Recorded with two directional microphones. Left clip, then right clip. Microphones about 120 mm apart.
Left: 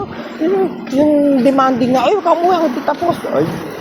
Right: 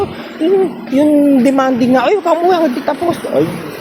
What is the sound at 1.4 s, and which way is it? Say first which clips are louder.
A woman's voice: even; 90° right.